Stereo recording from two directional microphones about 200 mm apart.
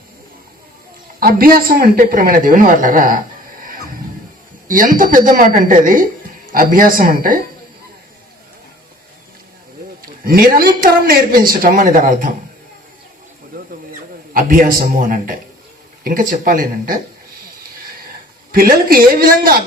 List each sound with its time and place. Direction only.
1.2 s speech: 45° right (ahead or behind)
4.7 s speech: 45° right (ahead or behind)
10.0 s speech: 50° right (ahead or behind)
13.5 s a sound: 45° right (ahead or behind)
14.3 s speech: 45° right (ahead or behind)
18.5 s speech: 45° right (ahead or behind)